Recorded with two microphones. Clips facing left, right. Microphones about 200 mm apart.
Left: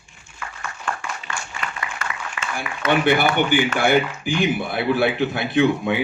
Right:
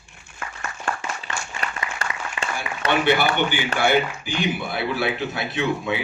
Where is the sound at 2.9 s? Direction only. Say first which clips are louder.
Left 2 dB; 50° left (ahead or behind).